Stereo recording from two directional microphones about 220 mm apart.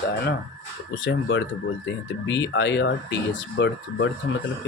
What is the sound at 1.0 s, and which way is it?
Speech, 60° left (ahead or behind).